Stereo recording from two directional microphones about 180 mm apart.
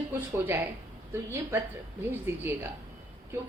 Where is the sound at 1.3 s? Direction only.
15° right (ahead or behind).